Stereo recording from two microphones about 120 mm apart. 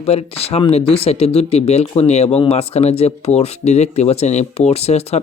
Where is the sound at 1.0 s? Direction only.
55° left (ahead or behind).